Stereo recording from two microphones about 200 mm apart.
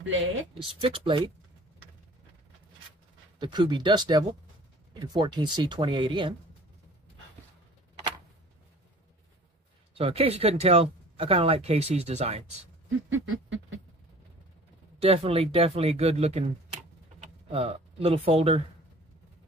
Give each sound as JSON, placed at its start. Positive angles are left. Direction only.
{"t": 0.0, "sound": "speech", "side_deg": -70}
{"t": 0.7, "sound": "speech", "side_deg": -25}
{"t": 3.3, "sound": "speech", "side_deg": -20}
{"t": 9.9, "sound": "speech", "side_deg": -30}
{"t": 13.2, "sound": "speech", "side_deg": -70}
{"t": 15.0, "sound": "speech", "side_deg": -30}